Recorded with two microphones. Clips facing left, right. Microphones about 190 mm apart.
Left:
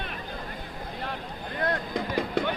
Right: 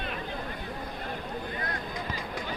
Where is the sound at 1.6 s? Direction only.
65° left (ahead or behind).